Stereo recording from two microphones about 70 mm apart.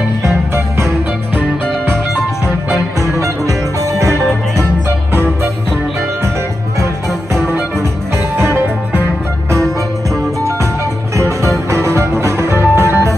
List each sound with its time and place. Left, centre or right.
3.0 s music: right
4.1 s music: left
8.4 s music: right
11.1 s music: right